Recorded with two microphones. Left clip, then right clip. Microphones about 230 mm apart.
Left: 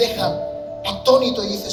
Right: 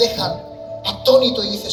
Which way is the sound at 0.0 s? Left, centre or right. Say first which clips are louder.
Right 2 dB; centre.